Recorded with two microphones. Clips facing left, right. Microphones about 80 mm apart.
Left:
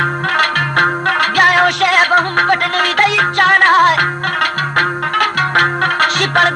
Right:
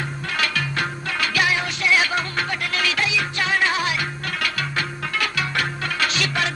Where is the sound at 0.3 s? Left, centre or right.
Left.